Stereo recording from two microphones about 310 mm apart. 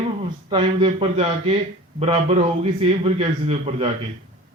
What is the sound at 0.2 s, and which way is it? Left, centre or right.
A man's voice, centre.